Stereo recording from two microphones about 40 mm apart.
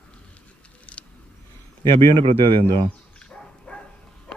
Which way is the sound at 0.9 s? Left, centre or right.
Left.